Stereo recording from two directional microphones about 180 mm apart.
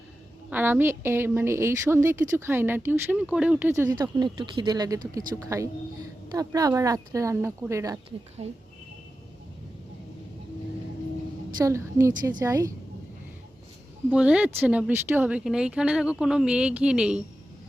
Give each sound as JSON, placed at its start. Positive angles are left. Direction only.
{"t": 0.5, "sound": "a woman's voice", "side_deg": -10}
{"t": 8.4, "sound": "speech", "side_deg": -35}
{"t": 11.5, "sound": "a woman's voice", "side_deg": -15}
{"t": 14.1, "sound": "speech", "side_deg": -5}